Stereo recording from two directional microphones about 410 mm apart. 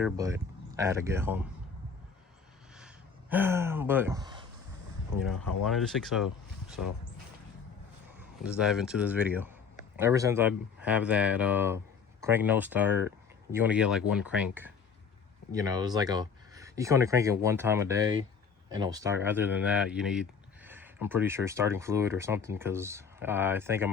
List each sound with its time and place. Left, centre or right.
0.0 s speech: centre
2.7 s a sound: centre
5.6 s speech: centre
6.8 s speech: left
8.4 s speech: centre